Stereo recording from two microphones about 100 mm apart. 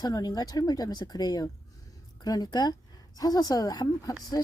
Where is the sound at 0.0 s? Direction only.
40° left (ahead or behind).